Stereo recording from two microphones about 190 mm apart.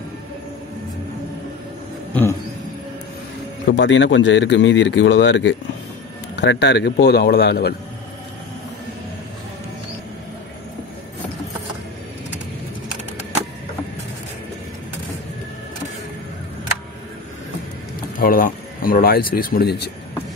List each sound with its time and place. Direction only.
3.6 s a man's voice: 70° left (ahead or behind)
18.1 s speech: 50° left (ahead or behind)